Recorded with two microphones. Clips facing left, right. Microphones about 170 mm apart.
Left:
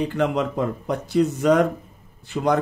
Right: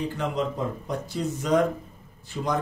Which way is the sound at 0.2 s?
70° left (ahead or behind).